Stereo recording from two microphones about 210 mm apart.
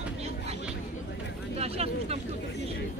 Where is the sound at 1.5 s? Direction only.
30° right (ahead or behind).